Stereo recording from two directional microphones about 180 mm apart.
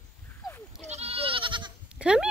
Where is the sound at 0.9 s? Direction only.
35° right (ahead or behind).